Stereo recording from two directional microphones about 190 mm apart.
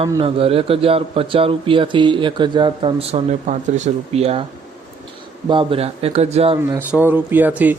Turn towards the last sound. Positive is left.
turn(degrees=-10)  # may be behind; listen again after turning